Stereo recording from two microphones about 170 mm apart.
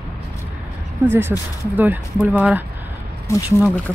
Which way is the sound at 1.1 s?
15° right (ahead or behind).